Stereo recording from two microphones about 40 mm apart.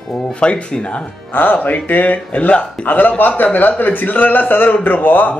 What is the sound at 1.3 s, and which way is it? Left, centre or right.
A man's voice, left.